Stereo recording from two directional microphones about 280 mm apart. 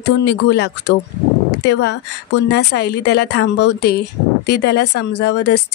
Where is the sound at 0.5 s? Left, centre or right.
Left.